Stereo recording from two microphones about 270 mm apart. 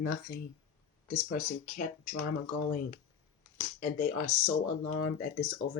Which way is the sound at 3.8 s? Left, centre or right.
Left.